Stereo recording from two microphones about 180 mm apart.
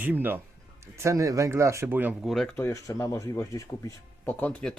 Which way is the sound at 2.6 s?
15° left (ahead or behind).